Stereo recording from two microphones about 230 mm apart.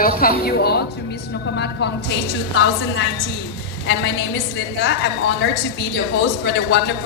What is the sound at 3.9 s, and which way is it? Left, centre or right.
Speech, left.